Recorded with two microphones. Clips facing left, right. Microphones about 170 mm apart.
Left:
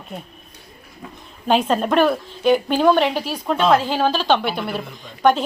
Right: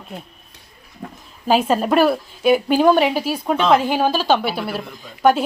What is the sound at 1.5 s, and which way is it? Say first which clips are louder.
A woman's voice: right 1 dB; 5° right (ahead or behind).